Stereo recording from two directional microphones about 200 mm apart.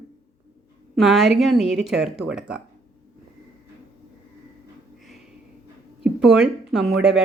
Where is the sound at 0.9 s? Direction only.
Centre (ahead or behind).